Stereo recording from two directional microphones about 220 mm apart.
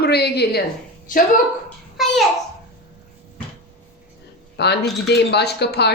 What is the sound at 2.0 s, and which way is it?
Speech, centre (ahead or behind).